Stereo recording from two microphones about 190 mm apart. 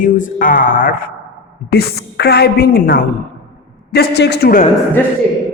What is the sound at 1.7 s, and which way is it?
A woman's voice, 55° left (ahead or behind).